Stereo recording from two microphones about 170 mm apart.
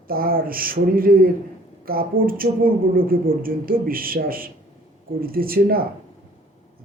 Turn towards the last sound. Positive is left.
turn(degrees=-60)  # may be behind; listen again after turning